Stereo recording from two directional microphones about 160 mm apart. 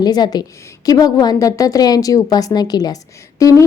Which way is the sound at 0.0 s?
25° left (ahead or behind).